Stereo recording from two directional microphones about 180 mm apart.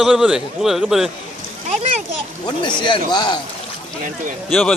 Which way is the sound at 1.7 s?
40° right (ahead or behind).